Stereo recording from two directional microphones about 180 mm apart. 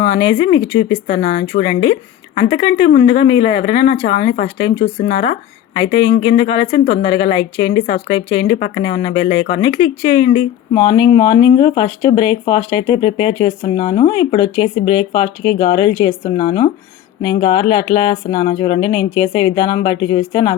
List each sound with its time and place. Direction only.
0.3 s a woman's voice: 30° left (ahead or behind)
7.9 s a woman's voice: 40° left (ahead or behind)
8.3 s speech: 30° left (ahead or behind)
8.5 s a woman's voice: 45° left (ahead or behind); by 20.6 s 30° left (ahead or behind)